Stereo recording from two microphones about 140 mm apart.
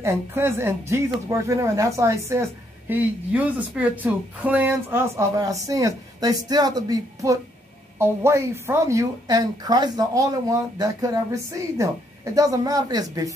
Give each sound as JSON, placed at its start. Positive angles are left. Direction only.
{"t": 0.0, "sound": "speech", "side_deg": -20}
{"t": 2.9, "sound": "speech", "side_deg": -10}
{"t": 12.4, "sound": "speech", "side_deg": -25}